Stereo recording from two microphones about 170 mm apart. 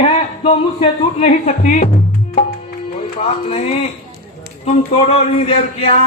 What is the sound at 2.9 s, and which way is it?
A man's voice, 40° left (ahead or behind).